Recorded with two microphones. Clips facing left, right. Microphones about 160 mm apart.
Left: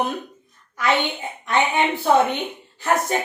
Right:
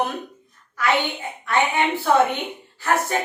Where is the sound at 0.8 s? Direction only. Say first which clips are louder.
Left 1 dB; 20° left (ahead or behind).